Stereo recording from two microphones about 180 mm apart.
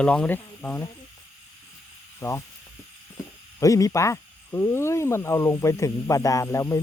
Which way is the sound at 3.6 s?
20° left (ahead or behind).